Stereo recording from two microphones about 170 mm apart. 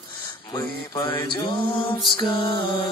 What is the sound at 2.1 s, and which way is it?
Music, 30° left (ahead or behind).